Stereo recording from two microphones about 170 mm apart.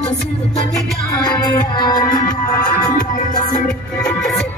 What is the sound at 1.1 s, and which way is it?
Music, 20° left (ahead or behind).